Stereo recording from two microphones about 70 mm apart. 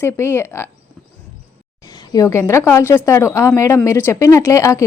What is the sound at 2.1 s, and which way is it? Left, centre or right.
A woman's voice, left.